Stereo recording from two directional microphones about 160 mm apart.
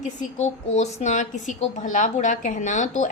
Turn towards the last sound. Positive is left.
turn(degrees=50)  # may be behind; listen again after turning